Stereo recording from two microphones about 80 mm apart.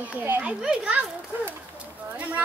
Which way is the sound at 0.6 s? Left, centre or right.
Centre.